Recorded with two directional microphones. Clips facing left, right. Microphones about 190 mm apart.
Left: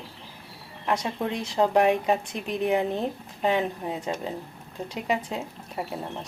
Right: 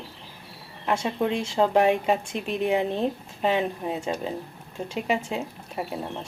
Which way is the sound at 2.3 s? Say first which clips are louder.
Right 1 dB; 25° right (ahead or behind).